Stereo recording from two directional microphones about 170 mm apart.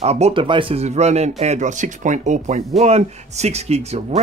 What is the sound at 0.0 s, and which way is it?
Speech, 40° right (ahead or behind).